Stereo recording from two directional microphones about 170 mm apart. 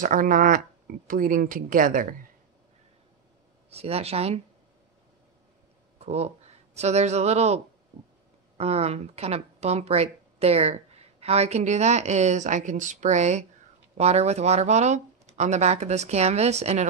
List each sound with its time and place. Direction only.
0.0 s speech: 50° right (ahead or behind)
3.7 s speech: 35° right (ahead or behind)
5.9 s speech: 40° right (ahead or behind)